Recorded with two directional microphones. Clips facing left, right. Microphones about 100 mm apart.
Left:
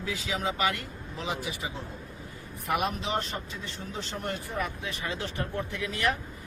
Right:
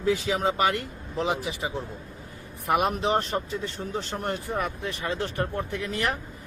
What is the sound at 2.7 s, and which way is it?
Speech, 45° right (ahead or behind).